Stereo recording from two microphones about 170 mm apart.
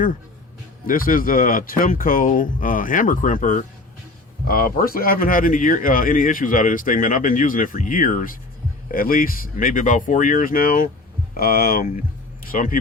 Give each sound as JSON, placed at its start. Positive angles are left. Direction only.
{"t": 0.9, "sound": "speech", "side_deg": 55}